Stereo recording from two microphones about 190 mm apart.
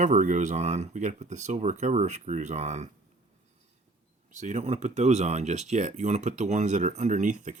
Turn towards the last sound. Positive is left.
turn(degrees=-40)  # may be behind; listen again after turning